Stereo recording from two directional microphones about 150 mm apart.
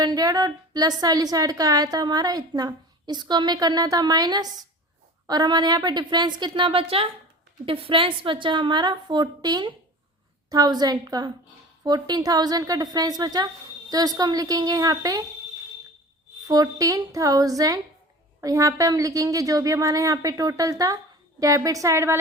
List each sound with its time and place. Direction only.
0.0 s a woman's voice: 25° right (ahead or behind)
16.5 s a woman's voice: 25° right (ahead or behind)